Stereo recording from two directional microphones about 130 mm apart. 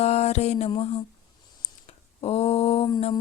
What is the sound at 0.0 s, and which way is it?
Music, 55° left (ahead or behind).